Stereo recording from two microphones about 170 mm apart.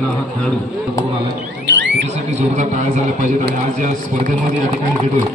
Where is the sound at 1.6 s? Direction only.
90° right.